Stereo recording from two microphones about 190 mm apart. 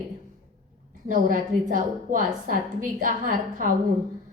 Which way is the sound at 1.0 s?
45° right (ahead or behind).